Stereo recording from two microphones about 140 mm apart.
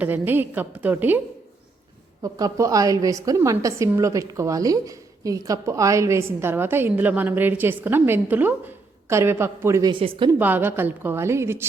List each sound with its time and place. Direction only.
0.0 s a woman's voice: 15° right (ahead or behind)
2.2 s a woman's voice: 25° right (ahead or behind)
9.9 s a woman's voice: 40° right (ahead or behind)
10.3 s a woman's voice: 15° right (ahead or behind)